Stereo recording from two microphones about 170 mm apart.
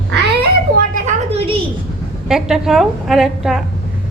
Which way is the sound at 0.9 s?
40° right (ahead or behind).